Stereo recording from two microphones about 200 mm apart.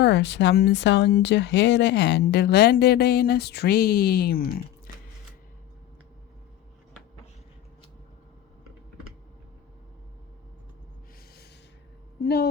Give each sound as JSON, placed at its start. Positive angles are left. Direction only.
{"t": 0.0, "sound": "speech", "side_deg": 60}
{"t": 12.2, "sound": "speech", "side_deg": 55}